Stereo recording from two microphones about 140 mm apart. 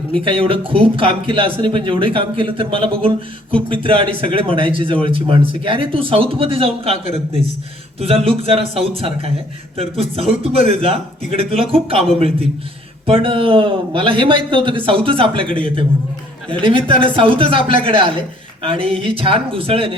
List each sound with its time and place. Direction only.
0.3 s speech: 40° right (ahead or behind)
13.1 s speech: 40° right (ahead or behind)
16.5 s speech: 40° right (ahead or behind)